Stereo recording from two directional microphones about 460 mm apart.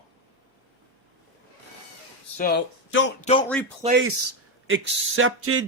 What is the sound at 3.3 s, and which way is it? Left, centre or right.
Speech, centre.